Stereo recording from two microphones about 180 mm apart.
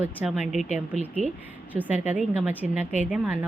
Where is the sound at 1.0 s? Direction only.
40° right (ahead or behind).